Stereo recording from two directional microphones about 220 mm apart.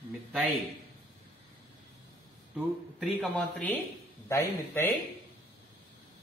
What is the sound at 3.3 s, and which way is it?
A man's voice, 5° left (ahead or behind).